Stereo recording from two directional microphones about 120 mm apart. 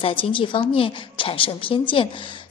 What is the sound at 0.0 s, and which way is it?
A woman's voice, 45° left (ahead or behind).